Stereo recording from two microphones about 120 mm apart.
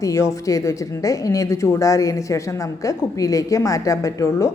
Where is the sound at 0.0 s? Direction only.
25° left (ahead or behind).